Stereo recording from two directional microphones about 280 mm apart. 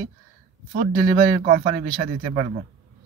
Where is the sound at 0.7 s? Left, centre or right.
Right.